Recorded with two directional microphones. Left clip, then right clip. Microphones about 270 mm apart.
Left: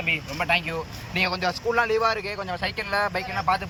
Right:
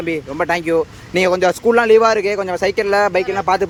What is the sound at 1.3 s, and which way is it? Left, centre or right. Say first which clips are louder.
A man's voice: right 12 dB; right.